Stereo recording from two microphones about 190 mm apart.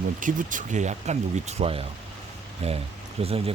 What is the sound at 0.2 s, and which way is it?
Speech, 45° right (ahead or behind).